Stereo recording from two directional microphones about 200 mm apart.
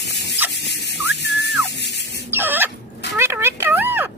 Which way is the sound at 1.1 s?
60° left (ahead or behind).